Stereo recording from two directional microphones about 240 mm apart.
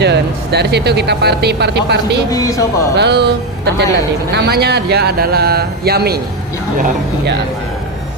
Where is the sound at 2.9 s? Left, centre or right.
Right.